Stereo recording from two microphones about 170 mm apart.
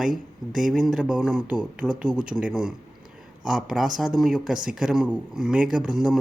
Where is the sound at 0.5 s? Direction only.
Centre (ahead or behind).